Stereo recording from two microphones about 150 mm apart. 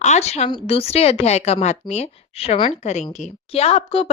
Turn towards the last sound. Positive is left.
turn(degrees=40)  # may be behind; listen again after turning